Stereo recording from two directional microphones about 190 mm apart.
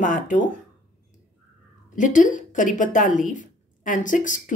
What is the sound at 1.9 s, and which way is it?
A woman's voice, 40° left (ahead or behind).